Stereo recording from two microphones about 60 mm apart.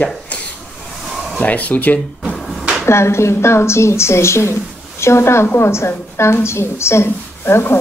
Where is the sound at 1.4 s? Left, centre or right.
Left.